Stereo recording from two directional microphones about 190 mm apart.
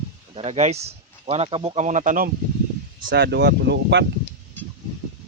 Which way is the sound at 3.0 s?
60° right (ahead or behind).